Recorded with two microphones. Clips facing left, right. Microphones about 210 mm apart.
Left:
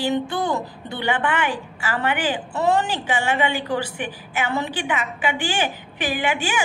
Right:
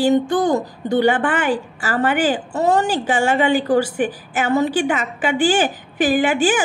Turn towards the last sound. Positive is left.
turn(degrees=-45)  # may be behind; listen again after turning